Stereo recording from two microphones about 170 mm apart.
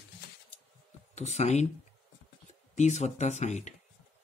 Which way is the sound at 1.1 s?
40° left (ahead or behind).